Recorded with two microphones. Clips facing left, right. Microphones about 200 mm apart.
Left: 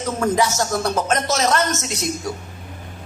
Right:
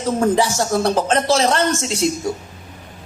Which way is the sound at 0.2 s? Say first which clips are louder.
Right 1 dB; 30° right (ahead or behind).